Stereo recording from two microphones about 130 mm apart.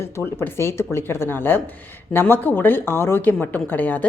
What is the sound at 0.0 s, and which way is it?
A woman's voice, 20° left (ahead or behind).